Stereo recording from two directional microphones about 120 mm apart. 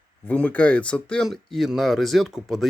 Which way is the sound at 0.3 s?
10° left (ahead or behind).